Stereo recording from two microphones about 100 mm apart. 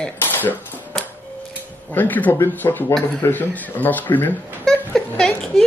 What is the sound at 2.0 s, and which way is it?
Speech, 15° left (ahead or behind).